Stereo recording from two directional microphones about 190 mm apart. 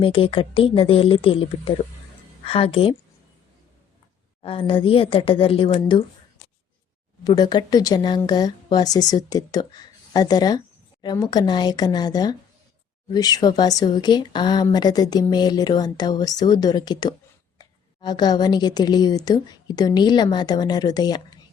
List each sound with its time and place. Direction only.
0.0 s speech: 30° left (ahead or behind)
4.4 s speech: 30° left (ahead or behind)
7.3 s speech: 20° left (ahead or behind)